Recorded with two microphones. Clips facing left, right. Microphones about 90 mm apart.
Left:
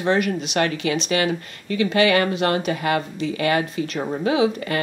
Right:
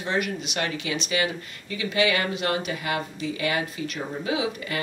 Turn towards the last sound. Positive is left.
turn(degrees=55)  # may be behind; listen again after turning